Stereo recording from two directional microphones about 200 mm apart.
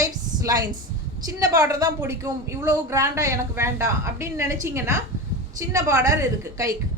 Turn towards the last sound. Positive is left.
turn(degrees=-15)  # may be behind; listen again after turning